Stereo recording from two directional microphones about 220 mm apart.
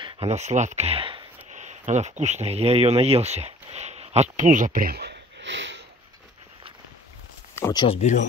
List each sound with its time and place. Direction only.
0.0 s speech: 25° right (ahead or behind); by 5.9 s 55° right (ahead or behind)
7.5 s speech: 15° left (ahead or behind); by 8.3 s 35° left (ahead or behind)